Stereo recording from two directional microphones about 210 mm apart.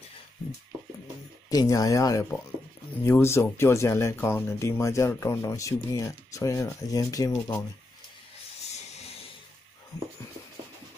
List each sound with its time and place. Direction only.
1.5 s speech: 15° left (ahead or behind)